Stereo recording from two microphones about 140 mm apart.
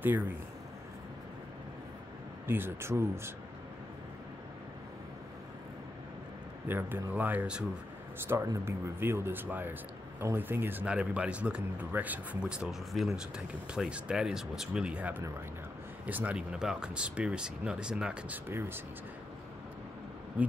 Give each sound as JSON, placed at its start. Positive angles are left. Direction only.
{"t": 2.4, "sound": "speech", "side_deg": -15}
{"t": 6.7, "sound": "speech", "side_deg": -15}
{"t": 18.5, "sound": "speech", "side_deg": -15}